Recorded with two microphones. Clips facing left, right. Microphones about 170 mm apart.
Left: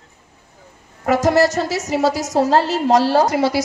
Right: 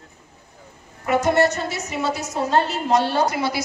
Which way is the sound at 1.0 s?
90° left.